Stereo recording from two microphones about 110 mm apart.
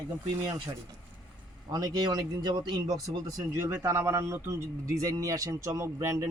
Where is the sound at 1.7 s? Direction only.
35° right (ahead or behind).